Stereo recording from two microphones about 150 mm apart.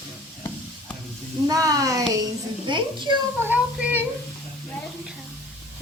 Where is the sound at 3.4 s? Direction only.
15° right (ahead or behind).